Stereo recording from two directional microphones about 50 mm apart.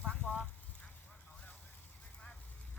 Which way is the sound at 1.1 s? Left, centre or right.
Left.